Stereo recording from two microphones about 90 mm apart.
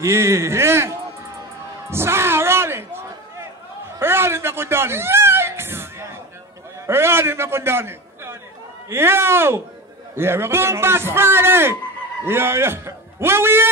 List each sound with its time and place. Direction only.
0.0 s a man's voice: 30° right (ahead or behind)
1.9 s a sound: 30° right (ahead or behind)
6.9 s a man's voice: 25° right (ahead or behind)